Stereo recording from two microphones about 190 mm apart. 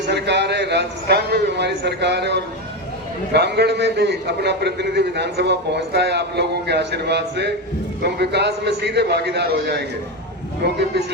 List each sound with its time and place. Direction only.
0.1 s a man's voice: 65° right (ahead or behind)